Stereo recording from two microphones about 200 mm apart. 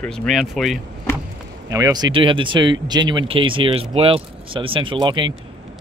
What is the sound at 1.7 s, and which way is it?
Speech, 15° right (ahead or behind).